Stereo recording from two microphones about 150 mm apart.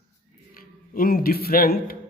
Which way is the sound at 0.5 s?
70° left (ahead or behind).